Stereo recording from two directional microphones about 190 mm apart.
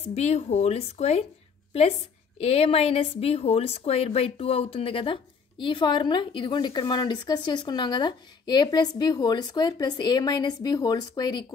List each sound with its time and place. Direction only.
0.1 s a woman's voice: 35° left (ahead or behind)